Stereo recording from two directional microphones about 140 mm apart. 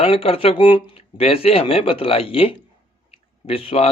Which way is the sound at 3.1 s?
40° left (ahead or behind).